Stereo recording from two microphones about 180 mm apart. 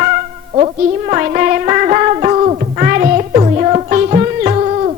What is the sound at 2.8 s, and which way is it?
Music, 50° right (ahead or behind).